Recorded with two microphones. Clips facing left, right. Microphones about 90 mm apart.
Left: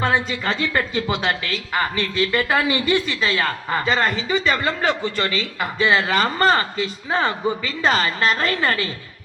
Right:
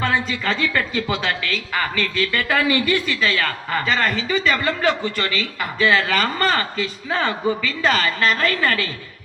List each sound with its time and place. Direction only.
0.0 s a woman's voice: 30° left (ahead or behind)